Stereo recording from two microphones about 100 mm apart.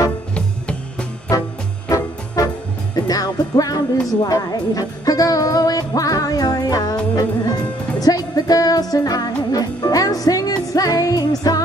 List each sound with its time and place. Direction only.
1.3 s music: 40° left (ahead or behind)